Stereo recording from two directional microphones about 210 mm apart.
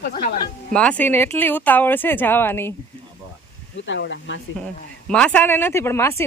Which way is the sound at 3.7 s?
60° left (ahead or behind).